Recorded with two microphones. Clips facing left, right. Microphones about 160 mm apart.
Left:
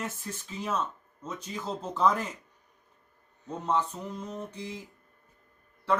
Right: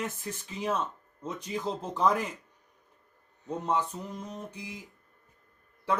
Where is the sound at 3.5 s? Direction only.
15° right (ahead or behind).